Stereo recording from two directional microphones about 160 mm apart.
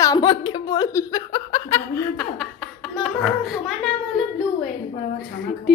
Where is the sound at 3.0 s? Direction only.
Centre (ahead or behind).